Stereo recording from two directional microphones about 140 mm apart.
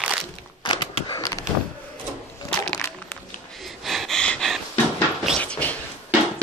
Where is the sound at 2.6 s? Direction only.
5° left (ahead or behind).